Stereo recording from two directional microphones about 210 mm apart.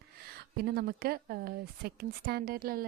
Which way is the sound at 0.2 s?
50° right (ahead or behind).